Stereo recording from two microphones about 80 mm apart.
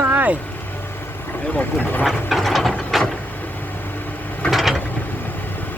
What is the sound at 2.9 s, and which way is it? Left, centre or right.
Vehicle, centre.